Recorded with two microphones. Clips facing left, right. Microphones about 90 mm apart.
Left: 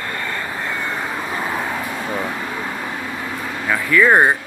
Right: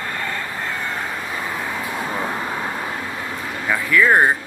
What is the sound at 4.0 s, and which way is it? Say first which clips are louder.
Speech: left 2 dB; 5° left (ahead or behind).